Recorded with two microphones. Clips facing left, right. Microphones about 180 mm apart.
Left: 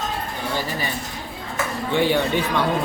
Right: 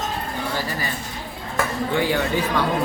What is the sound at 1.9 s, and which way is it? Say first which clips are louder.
Speech: left 3 dB; 25° left (ahead or behind).